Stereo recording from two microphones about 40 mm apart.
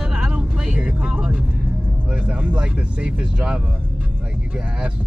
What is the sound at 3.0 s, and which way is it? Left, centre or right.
Speech, right.